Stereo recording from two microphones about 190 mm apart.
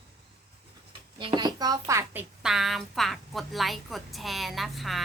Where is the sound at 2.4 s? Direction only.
Centre (ahead or behind).